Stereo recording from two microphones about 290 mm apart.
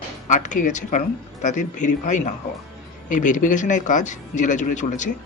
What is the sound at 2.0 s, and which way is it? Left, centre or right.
Speech, left.